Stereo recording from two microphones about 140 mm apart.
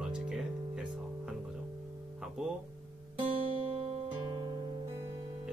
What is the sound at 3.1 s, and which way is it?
Guitar, 40° right (ahead or behind).